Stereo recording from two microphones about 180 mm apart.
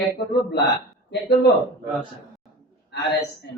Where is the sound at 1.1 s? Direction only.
65° left (ahead or behind).